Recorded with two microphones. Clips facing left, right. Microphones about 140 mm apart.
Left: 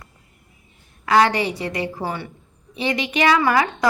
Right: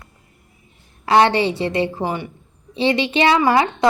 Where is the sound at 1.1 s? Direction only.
25° right (ahead or behind).